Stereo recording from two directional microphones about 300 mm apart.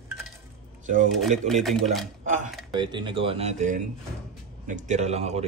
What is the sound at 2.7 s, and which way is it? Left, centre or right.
Speech, centre.